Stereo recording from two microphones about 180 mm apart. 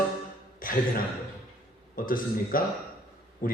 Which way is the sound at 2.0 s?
50° left (ahead or behind).